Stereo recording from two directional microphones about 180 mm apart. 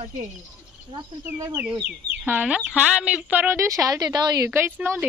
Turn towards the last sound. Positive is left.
turn(degrees=-10)  # may be behind; listen again after turning